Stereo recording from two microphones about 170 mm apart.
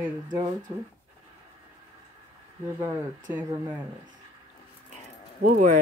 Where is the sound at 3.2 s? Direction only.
10° right (ahead or behind).